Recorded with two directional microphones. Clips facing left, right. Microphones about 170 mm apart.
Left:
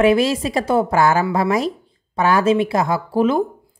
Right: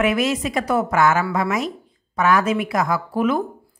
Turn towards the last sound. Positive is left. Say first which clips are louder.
# left 3 dB
turn(degrees=30)  # may be behind; listen again after turning